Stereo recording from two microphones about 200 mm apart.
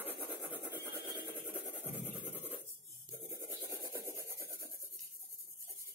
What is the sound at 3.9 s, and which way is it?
Rub, 15° right (ahead or behind).